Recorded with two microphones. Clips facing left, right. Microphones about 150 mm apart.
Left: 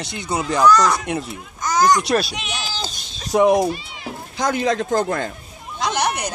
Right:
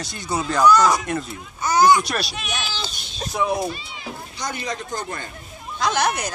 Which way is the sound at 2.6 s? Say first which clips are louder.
Left 2 dB; 40° left (ahead or behind).